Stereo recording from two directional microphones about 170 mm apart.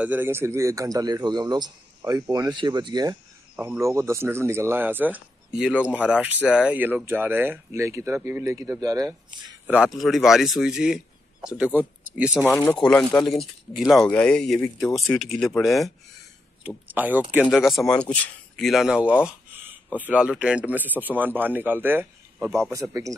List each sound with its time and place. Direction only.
0.0 s a man's voice: 10° right (ahead or behind)
3.5 s speech: 15° right (ahead or behind)
9.7 s speech: 5° right (ahead or behind)
12.4 s speech: 10° left (ahead or behind)
16.6 s a man's voice: 10° right (ahead or behind)